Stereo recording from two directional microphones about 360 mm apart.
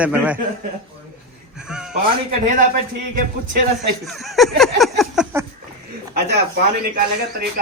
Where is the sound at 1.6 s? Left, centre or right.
Centre.